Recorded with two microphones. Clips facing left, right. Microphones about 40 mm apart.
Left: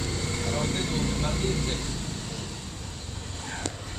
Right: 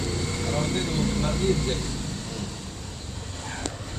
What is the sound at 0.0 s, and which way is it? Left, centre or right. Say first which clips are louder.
Vehicle: right 2 dB; centre.